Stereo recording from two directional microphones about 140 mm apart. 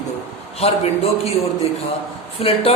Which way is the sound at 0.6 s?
45° left (ahead or behind).